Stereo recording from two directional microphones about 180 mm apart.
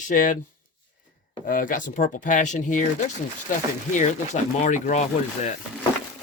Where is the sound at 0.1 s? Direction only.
45° left (ahead or behind).